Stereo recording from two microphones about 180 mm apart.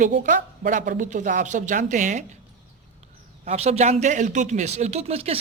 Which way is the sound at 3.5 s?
35° right (ahead or behind).